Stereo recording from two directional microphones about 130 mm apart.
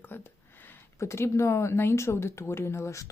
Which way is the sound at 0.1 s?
15° left (ahead or behind).